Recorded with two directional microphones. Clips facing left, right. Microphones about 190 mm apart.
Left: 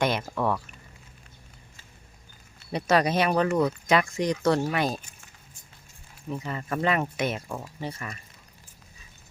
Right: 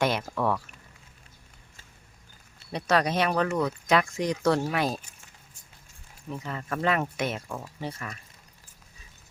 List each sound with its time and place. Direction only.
0.0 s a sound: centre (ahead or behind)
2.7 s speech: 5° left (ahead or behind)
6.2 s speech: 5° left (ahead or behind)